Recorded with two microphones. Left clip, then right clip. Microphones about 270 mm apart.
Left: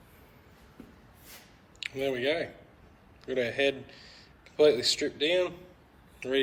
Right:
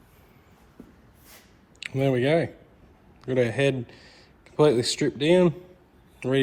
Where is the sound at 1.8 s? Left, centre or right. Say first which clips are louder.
Right 6 dB; centre.